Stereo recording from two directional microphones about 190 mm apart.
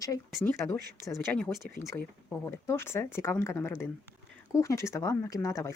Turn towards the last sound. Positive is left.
turn(degrees=15)  # may be behind; listen again after turning